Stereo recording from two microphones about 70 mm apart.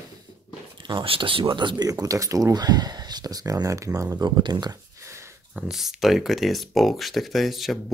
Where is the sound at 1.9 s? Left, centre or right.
Right.